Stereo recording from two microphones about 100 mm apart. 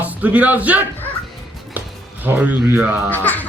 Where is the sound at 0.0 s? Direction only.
15° right (ahead or behind).